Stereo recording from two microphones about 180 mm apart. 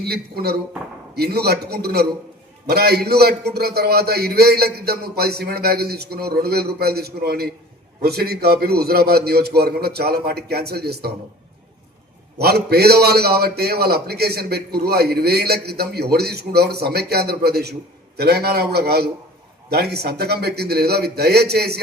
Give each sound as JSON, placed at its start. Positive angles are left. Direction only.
{"t": 0.0, "sound": "a man's voice", "side_deg": -60}
{"t": 12.4, "sound": "a man's voice", "side_deg": -60}